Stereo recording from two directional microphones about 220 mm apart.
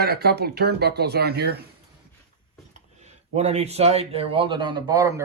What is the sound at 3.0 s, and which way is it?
A man's voice, 30° right (ahead or behind).